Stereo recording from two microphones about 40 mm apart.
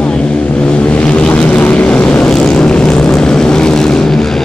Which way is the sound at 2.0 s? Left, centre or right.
Left.